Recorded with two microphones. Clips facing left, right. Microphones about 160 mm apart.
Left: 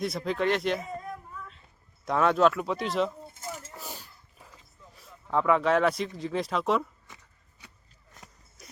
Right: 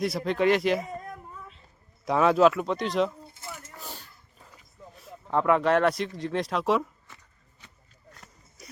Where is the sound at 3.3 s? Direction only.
45° left (ahead or behind).